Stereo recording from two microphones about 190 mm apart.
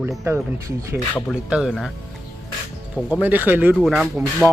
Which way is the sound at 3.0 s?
5° right (ahead or behind).